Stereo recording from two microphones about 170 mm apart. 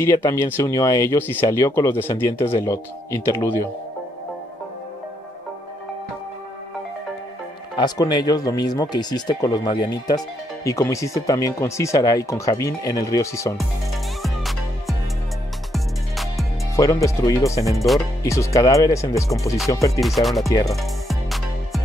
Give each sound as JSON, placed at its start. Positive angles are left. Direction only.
{"t": 0.0, "sound": "speech", "side_deg": 15}
{"t": 7.7, "sound": "speech", "side_deg": 25}
{"t": 14.2, "sound": "music", "side_deg": 0}
{"t": 16.7, "sound": "speech", "side_deg": 20}
{"t": 17.7, "sound": "speech", "side_deg": 0}
{"t": 18.2, "sound": "speech", "side_deg": 15}
{"t": 20.0, "sound": "speech", "side_deg": 0}
{"t": 20.4, "sound": "speech", "side_deg": 20}
{"t": 20.7, "sound": "music", "side_deg": 0}